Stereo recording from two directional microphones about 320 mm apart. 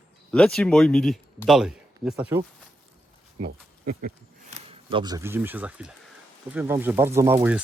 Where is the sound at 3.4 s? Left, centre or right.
Right.